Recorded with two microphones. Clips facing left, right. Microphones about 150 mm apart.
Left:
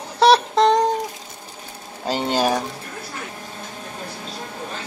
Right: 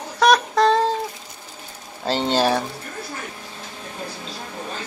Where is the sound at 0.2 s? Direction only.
25° left (ahead or behind).